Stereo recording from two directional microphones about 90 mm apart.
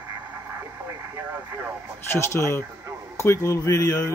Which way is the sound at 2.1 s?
30° left (ahead or behind).